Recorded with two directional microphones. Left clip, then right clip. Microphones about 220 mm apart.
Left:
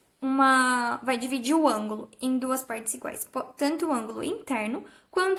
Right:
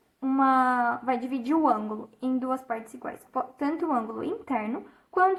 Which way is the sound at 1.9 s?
40° left (ahead or behind).